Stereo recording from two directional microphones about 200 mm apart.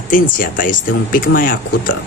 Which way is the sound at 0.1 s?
40° left (ahead or behind).